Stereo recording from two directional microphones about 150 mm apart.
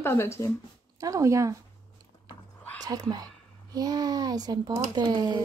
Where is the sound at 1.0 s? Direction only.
20° right (ahead or behind).